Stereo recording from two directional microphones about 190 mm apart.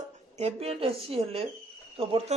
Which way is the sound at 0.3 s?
35° right (ahead or behind).